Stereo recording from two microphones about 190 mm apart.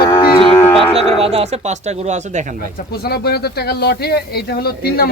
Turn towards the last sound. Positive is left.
turn(degrees=55)  # may be behind; listen again after turning